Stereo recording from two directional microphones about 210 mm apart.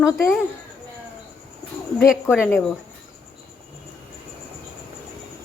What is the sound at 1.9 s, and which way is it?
Speech, centre (ahead or behind).